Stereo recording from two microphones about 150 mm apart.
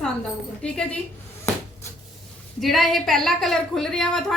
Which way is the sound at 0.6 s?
5° left (ahead or behind).